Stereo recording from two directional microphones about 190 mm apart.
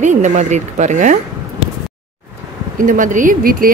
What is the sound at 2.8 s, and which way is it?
Speech, 45° right (ahead or behind).